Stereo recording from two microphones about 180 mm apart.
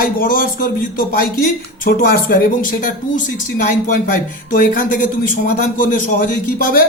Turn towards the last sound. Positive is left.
turn(degrees=50)  # may be behind; listen again after turning